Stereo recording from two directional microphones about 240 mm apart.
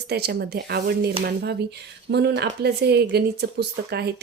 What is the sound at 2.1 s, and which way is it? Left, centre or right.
Speech, right.